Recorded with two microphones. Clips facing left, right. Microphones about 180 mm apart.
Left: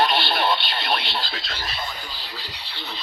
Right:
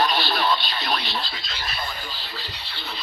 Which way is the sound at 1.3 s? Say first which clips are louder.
Left 3 dB; 65° left (ahead or behind).